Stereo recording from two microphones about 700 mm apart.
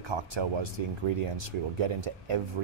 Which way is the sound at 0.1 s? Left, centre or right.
Right.